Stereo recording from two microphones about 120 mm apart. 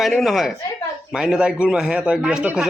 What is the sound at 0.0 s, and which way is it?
A woman's voice, centre (ahead or behind).